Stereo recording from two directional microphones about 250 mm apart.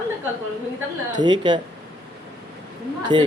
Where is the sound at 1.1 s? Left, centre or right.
Centre.